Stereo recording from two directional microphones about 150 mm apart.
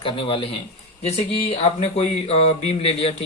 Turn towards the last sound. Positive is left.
turn(degrees=40)  # may be behind; listen again after turning